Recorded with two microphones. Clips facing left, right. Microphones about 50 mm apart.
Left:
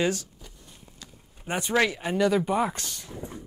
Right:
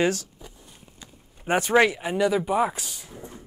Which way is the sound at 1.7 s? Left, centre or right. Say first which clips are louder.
Right 4 dB; centre.